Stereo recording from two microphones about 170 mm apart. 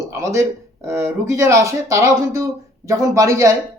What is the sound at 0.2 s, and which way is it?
Speech, 15° right (ahead or behind).